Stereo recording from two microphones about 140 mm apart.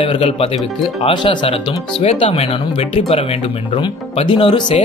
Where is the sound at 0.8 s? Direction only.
35° left (ahead or behind).